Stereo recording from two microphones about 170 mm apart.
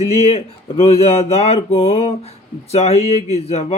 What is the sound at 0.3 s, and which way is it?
Speech, 35° left (ahead or behind).